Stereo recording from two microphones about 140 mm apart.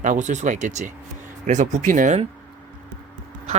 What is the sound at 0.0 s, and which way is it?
Speech, 60° right (ahead or behind).